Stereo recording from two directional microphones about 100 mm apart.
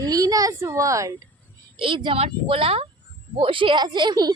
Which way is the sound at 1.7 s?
55° right (ahead or behind).